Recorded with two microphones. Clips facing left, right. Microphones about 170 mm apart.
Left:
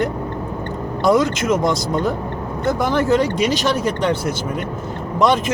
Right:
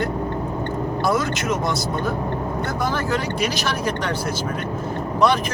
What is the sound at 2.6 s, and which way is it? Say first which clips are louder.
Speech: left 9 dB; 20° left (ahead or behind).